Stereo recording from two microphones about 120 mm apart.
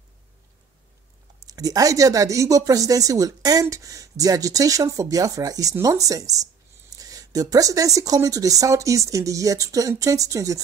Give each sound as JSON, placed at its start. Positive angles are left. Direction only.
{"t": 1.4, "sound": "speech", "side_deg": -30}